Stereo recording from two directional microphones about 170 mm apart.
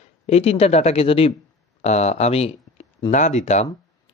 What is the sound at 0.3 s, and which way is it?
Speech, 35° left (ahead or behind).